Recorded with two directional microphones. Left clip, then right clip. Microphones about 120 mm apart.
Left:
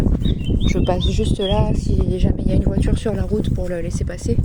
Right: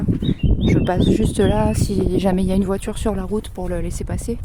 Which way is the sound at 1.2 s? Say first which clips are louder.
Right 2 dB; 65° right (ahead or behind).